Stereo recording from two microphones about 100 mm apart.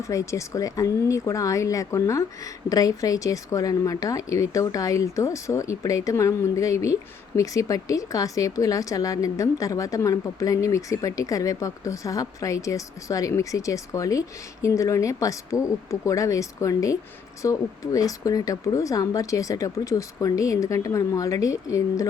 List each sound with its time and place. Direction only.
0.0 s a woman's voice: 30° left (ahead or behind)